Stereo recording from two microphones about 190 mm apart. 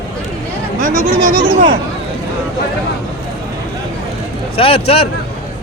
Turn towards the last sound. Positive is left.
turn(degrees=30)  # may be behind; listen again after turning